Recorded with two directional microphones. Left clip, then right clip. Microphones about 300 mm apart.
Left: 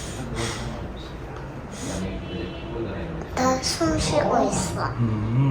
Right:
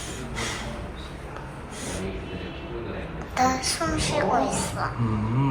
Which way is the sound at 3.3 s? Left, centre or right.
Centre.